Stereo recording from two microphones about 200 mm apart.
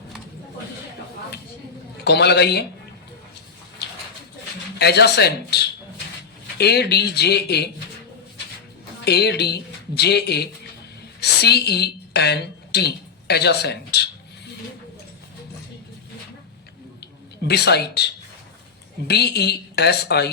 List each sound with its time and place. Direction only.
2.0 s speech: 55° left (ahead or behind)
3.8 s a sound: 55° left (ahead or behind)
4.8 s speech: 55° left (ahead or behind)
9.0 s a woman's voice: 55° left (ahead or behind)
17.4 s speech: 55° left (ahead or behind)